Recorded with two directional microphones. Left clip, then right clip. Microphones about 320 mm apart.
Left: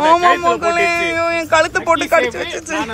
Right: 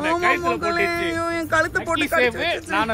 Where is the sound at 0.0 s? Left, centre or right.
Centre.